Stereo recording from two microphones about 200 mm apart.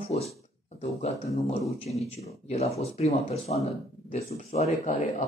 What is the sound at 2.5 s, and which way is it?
Speech, 30° left (ahead or behind).